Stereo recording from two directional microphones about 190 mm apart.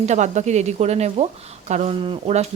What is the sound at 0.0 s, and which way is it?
Speech, 40° right (ahead or behind).